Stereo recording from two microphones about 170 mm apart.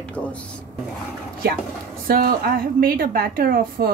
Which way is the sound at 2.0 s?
60° right (ahead or behind).